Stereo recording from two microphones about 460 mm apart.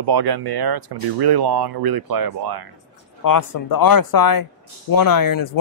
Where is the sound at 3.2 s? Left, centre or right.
Left.